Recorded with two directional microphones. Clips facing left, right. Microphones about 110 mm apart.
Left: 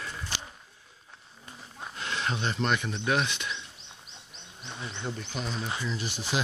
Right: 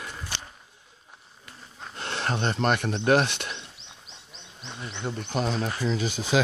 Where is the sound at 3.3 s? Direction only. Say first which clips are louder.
Even; 65° right (ahead or behind).